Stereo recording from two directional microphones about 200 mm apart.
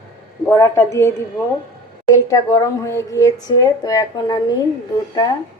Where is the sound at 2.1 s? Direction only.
15° left (ahead or behind).